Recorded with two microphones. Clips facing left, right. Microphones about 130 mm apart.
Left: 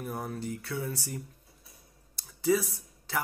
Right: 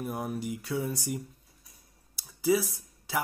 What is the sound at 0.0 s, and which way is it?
Speech, 15° right (ahead or behind).